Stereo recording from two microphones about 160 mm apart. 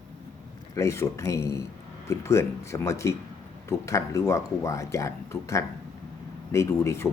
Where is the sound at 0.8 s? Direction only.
20° left (ahead or behind).